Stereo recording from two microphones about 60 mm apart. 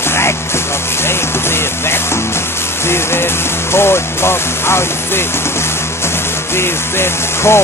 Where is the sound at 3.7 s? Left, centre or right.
Left.